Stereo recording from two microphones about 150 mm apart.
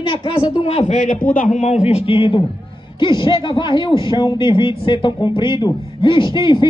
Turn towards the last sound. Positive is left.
turn(degrees=30)  # may be behind; listen again after turning